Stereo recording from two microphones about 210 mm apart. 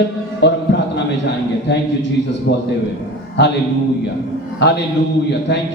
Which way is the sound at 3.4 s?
55° left (ahead or behind).